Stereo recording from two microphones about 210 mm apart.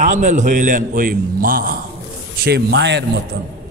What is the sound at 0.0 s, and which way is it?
A man's voice, 35° right (ahead or behind).